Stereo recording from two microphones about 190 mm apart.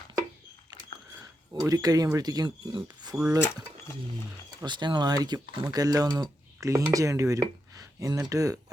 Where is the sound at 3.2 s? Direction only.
5° right (ahead or behind).